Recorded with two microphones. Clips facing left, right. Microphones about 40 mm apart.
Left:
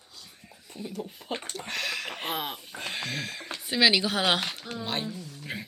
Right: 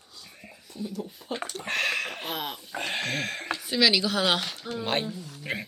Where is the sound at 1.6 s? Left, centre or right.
Right.